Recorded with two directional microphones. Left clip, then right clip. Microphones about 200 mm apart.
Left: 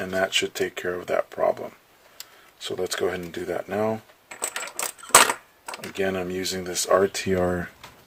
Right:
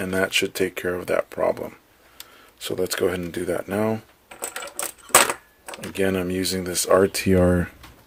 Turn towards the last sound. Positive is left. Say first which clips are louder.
# right 4 dB
turn(degrees=-45)  # may be behind; listen again after turning